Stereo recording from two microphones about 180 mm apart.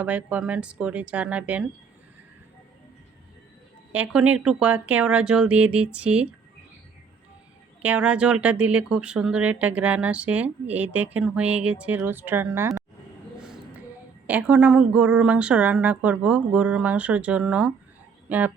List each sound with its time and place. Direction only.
0.0 s a woman's voice: 10° right (ahead or behind)
3.9 s a woman's voice: 5° right (ahead or behind)
7.8 s a woman's voice: 5° right (ahead or behind)
13.4 s a sound: 5° right (ahead or behind)
14.3 s a woman's voice: 5° right (ahead or behind)